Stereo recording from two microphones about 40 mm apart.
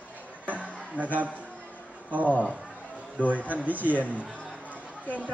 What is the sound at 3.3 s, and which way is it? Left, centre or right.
Speech, right.